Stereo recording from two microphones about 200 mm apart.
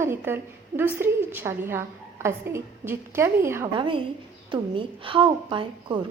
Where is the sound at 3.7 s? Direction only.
25° right (ahead or behind).